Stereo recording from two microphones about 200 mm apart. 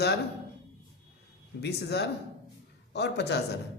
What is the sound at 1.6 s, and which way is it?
Speech, 55° left (ahead or behind).